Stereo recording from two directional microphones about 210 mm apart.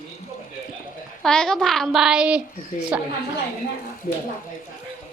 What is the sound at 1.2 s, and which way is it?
A child's voice, 5° left (ahead or behind).